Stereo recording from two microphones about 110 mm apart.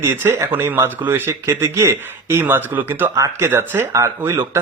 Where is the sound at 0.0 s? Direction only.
20° right (ahead or behind).